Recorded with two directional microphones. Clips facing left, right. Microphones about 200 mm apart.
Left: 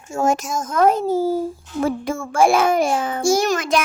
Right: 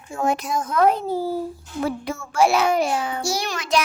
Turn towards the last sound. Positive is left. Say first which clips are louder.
# left 6 dB
turn(degrees=50)  # may be behind; listen again after turning